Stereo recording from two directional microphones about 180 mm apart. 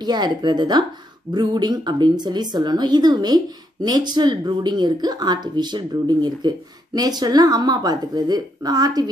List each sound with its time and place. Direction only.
0.0 s speech: 25° right (ahead or behind)